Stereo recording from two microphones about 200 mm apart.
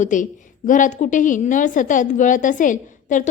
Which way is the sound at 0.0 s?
40° left (ahead or behind).